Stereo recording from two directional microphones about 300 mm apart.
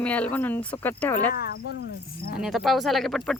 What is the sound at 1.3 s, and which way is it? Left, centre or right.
Speech, left.